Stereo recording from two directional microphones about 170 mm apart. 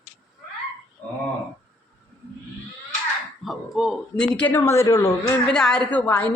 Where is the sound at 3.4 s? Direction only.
Centre (ahead or behind).